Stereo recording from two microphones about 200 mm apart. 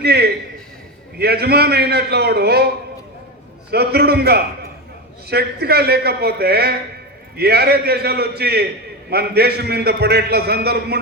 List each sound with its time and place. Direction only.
0.0 s a man's voice: 55° right (ahead or behind)
3.7 s a man's voice: 55° right (ahead or behind)